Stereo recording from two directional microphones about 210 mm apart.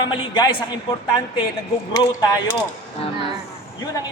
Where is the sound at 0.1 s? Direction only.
20° left (ahead or behind).